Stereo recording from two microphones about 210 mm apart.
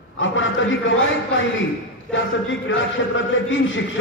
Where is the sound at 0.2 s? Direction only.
65° left (ahead or behind).